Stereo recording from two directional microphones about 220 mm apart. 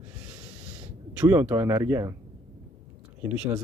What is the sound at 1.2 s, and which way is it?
Speech, 10° right (ahead or behind).